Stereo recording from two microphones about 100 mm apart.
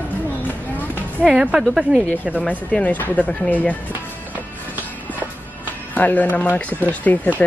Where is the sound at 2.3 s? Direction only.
15° left (ahead or behind).